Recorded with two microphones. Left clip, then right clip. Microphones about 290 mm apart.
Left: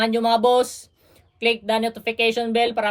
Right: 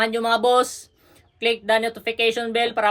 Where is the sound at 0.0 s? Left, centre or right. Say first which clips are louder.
Left 1 dB; centre.